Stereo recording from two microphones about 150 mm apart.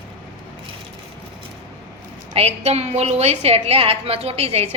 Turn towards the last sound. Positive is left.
turn(degrees=-40)  # may be behind; listen again after turning